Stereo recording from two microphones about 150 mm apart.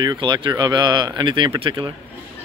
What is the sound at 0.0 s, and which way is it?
Speech, 30° right (ahead or behind).